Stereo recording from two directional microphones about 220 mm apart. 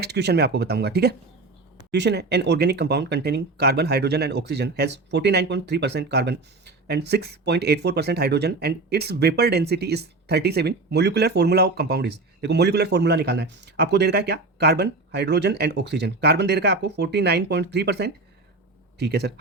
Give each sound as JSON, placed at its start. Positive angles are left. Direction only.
{"t": 0.0, "sound": "speech", "side_deg": -50}